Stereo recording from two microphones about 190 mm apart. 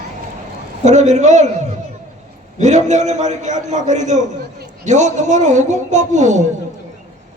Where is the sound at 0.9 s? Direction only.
40° right (ahead or behind).